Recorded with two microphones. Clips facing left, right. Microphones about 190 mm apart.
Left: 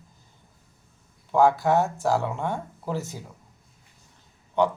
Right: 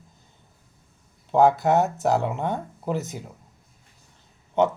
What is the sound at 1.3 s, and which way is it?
Speech, 20° right (ahead or behind).